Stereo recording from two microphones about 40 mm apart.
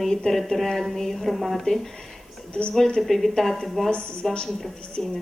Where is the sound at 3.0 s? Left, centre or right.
Centre.